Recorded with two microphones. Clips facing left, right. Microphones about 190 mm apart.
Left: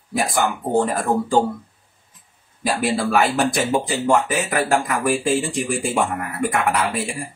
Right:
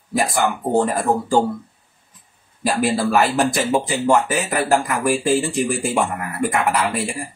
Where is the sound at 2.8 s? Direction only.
Centre (ahead or behind).